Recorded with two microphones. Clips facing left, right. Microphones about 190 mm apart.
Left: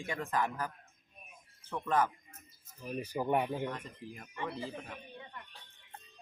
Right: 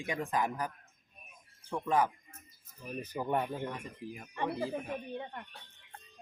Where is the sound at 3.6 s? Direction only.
10° right (ahead or behind).